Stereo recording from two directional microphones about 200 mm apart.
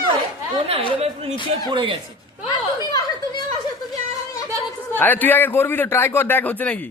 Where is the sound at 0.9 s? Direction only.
30° right (ahead or behind).